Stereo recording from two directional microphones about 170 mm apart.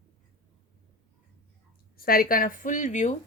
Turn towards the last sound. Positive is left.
turn(degrees=45)  # may be behind; listen again after turning